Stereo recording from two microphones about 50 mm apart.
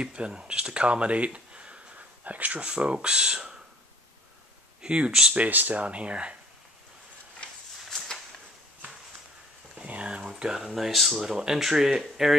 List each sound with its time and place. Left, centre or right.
0.0 s speech: centre
4.8 s speech: centre
5.3 s speech: right
7.9 s a sound: centre
9.8 s speech: right
10.4 s speech: centre